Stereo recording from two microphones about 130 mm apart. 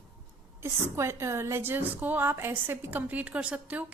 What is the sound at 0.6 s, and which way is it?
A woman's voice, 20° right (ahead or behind).